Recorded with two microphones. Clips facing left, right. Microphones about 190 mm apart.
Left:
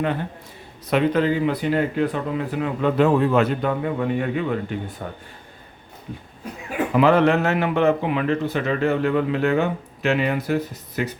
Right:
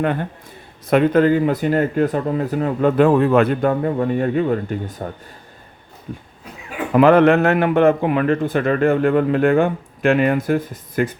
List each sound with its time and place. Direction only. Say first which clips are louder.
0.0 s a man's voice: right 3 dB; 55° right (ahead or behind)
6.9 s a man's voice: right 5 dB; 55° right (ahead or behind)